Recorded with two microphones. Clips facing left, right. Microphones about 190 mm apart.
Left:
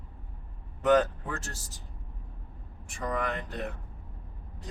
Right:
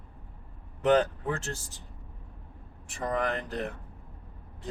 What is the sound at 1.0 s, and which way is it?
Speech, 30° right (ahead or behind).